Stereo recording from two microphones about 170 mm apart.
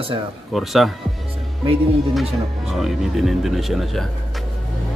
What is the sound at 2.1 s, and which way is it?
Speech, centre (ahead or behind).